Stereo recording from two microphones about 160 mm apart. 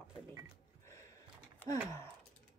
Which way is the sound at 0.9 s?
20° left (ahead or behind).